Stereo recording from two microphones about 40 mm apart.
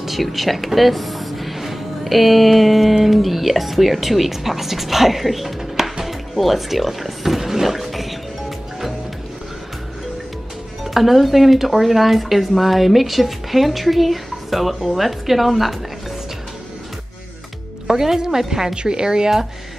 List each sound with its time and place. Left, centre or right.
0.0 s speech: centre
10.8 s speech: centre
17.8 s a woman's voice: centre
18.8 s speech: right